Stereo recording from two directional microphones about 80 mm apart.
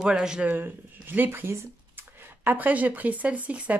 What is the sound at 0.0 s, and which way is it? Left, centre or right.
Speech, centre.